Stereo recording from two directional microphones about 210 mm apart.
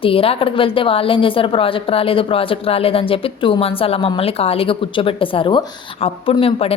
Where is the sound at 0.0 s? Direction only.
25° left (ahead or behind).